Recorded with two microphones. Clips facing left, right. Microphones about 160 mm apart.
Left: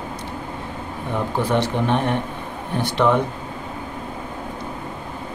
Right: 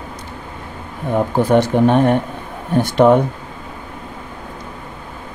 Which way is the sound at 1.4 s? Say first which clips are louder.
Right 8 dB; 45° right (ahead or behind).